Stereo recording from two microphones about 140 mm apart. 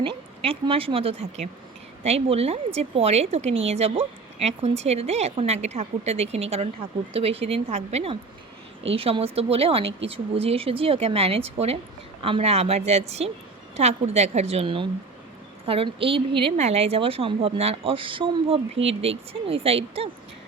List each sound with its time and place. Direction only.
0.0 s speech: 40° right (ahead or behind)
16.6 s speech: 50° right (ahead or behind)